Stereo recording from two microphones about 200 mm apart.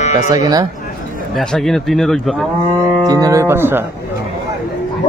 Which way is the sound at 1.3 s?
Centre (ahead or behind).